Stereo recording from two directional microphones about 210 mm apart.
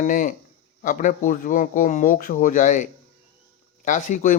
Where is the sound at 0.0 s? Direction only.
40° left (ahead or behind).